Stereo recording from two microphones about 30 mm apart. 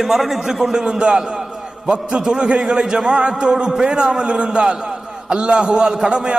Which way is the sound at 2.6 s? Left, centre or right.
Centre.